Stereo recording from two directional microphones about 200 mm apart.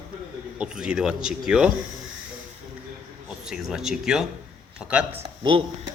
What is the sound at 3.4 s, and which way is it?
Speech, 5° right (ahead or behind).